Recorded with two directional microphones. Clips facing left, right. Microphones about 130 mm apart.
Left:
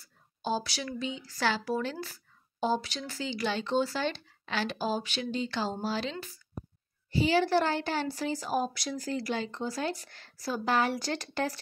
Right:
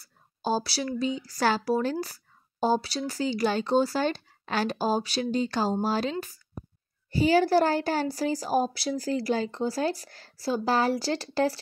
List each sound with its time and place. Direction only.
0.0 s a woman's voice: 40° right (ahead or behind)